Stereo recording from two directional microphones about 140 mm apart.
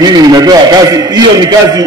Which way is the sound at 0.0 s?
30° right (ahead or behind).